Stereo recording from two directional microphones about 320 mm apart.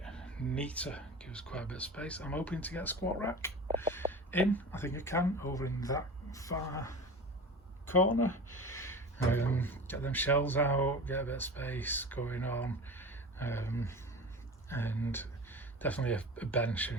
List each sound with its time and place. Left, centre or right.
0.0 s speech: centre
7.9 s speech: left
8.3 s speech: centre